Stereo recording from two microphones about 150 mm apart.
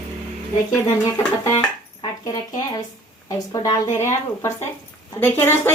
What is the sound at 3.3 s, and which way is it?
A woman's voice, 25° left (ahead or behind).